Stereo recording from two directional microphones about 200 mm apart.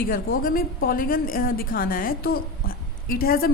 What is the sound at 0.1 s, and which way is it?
A woman's voice, 45° left (ahead or behind).